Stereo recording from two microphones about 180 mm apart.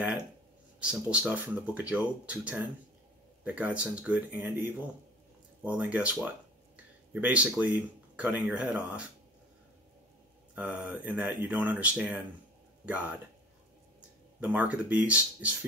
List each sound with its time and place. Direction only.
0.7 s speech: 5° right (ahead or behind)
7.2 s speech: 5° right (ahead or behind)
10.5 s speech: 5° right (ahead or behind)
14.4 s speech: 5° right (ahead or behind)